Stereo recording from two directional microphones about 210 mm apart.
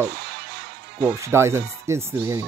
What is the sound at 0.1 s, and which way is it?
Music, 50° right (ahead or behind).